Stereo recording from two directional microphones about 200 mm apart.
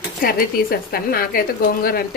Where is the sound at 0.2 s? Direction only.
45° left (ahead or behind).